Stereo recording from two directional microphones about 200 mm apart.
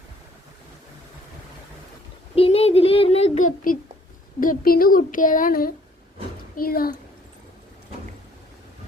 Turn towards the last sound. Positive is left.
turn(degrees=45)  # may be behind; listen again after turning